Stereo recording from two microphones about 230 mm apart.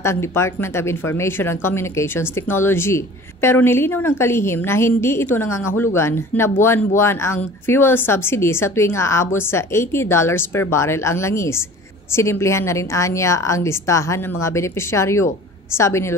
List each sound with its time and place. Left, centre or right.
0.0 s speech: centre